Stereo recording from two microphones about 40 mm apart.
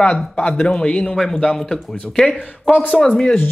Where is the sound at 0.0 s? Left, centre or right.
Left.